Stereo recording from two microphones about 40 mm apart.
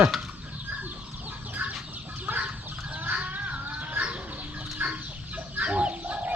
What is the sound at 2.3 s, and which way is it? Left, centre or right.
Chicken, right.